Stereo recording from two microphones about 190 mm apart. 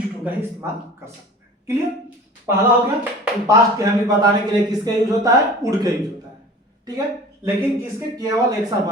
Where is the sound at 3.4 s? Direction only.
20° right (ahead or behind).